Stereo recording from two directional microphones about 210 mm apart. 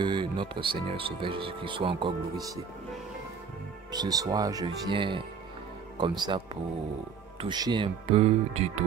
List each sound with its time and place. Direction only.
0.0 s speech: 20° right (ahead or behind)
3.9 s speech: 20° right (ahead or behind)